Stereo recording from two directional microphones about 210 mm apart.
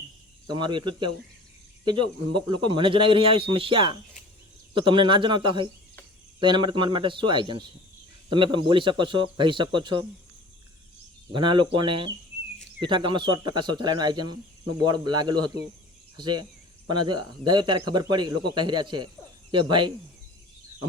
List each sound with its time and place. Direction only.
0.5 s a man's voice: 20° right (ahead or behind)
11.3 s a man's voice: 25° right (ahead or behind)